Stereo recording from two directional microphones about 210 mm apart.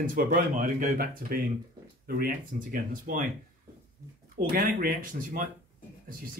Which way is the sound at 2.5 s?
40° right (ahead or behind).